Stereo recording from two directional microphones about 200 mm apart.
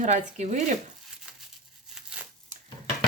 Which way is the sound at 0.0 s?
35° right (ahead or behind).